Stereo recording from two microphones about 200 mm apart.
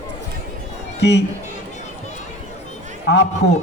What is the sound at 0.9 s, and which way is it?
Speech, 60° left (ahead or behind).